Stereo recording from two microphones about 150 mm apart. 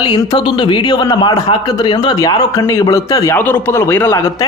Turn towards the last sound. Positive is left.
turn(degrees=20)  # may be behind; listen again after turning